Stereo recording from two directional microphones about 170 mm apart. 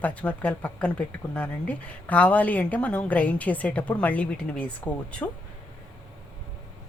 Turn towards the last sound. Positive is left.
turn(degrees=5)  # may be behind; listen again after turning